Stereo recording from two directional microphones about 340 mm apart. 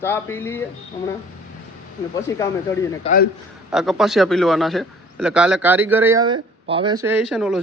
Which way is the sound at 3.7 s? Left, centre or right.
Centre.